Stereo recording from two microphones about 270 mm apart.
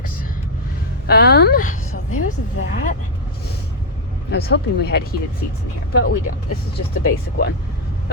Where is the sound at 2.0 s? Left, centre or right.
Left.